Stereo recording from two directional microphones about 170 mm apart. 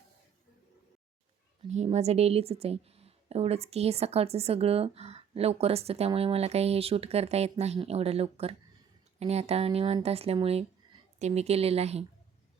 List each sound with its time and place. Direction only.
1.6 s a woman's voice: 40° right (ahead or behind)